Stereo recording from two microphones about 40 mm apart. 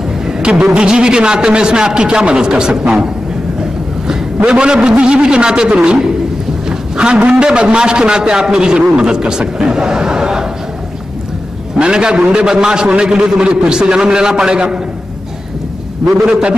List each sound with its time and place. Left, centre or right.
0.4 s a sound: right
0.7 s a man's voice: right
4.5 s a man's voice: centre
6.7 s a man's voice: right
11.8 s a man's voice: centre
16.1 s a man's voice: right